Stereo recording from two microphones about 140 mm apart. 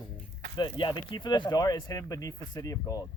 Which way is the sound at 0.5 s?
35° left (ahead or behind).